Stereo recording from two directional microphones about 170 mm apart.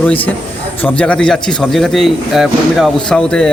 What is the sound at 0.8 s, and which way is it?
A man's voice, 5° left (ahead or behind).